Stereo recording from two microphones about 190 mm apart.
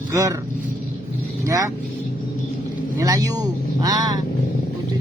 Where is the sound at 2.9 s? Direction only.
20° right (ahead or behind).